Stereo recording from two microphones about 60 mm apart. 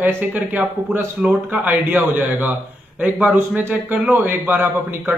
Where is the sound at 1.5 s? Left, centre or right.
Right.